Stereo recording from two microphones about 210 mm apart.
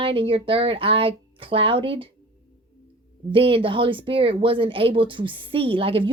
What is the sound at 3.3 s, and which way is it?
Speech, 25° right (ahead or behind).